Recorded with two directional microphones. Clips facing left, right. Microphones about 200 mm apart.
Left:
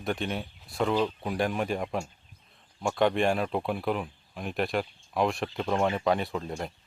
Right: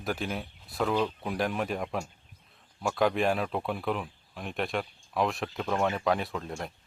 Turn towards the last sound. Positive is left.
turn(degrees=0)  # may be behind; listen again after turning